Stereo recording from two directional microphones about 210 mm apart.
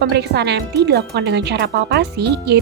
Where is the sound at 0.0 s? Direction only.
50° right (ahead or behind).